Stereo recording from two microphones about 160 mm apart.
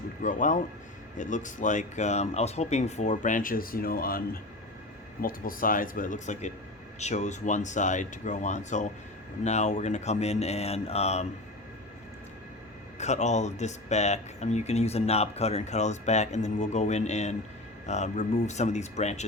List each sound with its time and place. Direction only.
0.2 s speech: 55° left (ahead or behind)
5.2 s speech: 60° left (ahead or behind); by 11.3 s 40° left (ahead or behind)
13.0 s speech: 45° left (ahead or behind)